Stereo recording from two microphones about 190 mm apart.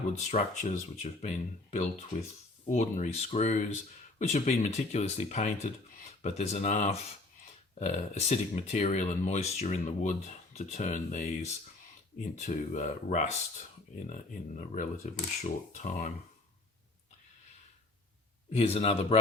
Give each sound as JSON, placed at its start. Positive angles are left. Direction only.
{"t": 0.1, "sound": "speech", "side_deg": 40}
{"t": 14.7, "sound": "speech", "side_deg": 35}
{"t": 18.5, "sound": "speech", "side_deg": 30}